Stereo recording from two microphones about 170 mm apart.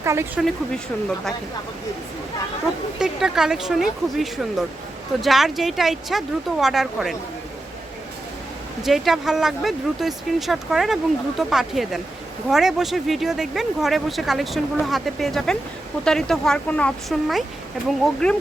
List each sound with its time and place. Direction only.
0.0 s speech: 15° right (ahead or behind)
3.0 s speech: 5° right (ahead or behind)
8.8 s speech: centre (ahead or behind)